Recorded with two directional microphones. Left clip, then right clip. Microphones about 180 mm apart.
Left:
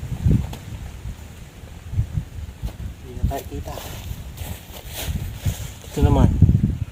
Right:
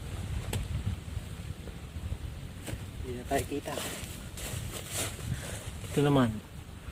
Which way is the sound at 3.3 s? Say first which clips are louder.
Left 1 dB; 40° right (ahead or behind).